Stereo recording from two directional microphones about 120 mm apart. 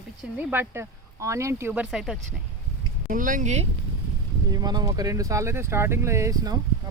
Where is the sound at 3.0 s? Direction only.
90° right.